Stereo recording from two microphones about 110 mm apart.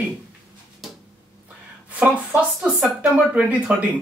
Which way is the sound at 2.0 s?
10° right (ahead or behind).